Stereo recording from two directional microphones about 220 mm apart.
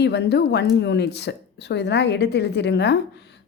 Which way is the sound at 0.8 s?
50° left (ahead or behind).